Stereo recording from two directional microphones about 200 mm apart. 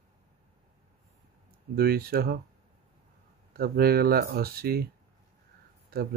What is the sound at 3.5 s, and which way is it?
Speech, 50° right (ahead or behind).